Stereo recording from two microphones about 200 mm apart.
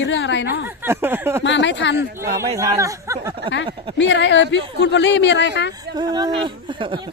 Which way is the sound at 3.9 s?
60° left (ahead or behind).